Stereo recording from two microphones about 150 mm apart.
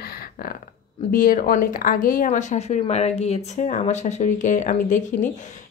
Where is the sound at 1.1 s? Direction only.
70° left (ahead or behind).